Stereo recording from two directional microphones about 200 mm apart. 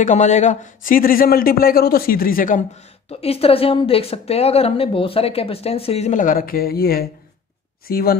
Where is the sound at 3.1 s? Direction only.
30° left (ahead or behind); by 8.1 s 50° left (ahead or behind).